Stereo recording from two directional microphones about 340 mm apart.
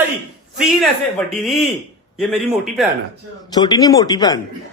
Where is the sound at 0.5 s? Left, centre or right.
Centre.